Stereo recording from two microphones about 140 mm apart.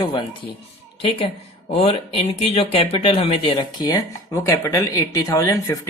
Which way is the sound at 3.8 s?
25° left (ahead or behind).